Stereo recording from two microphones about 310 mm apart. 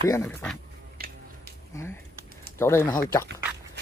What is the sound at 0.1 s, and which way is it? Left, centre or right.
Speech, centre.